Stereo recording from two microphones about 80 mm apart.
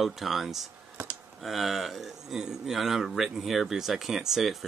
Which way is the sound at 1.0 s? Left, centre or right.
Right.